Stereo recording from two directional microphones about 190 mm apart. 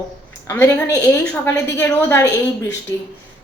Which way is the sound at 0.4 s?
15° left (ahead or behind).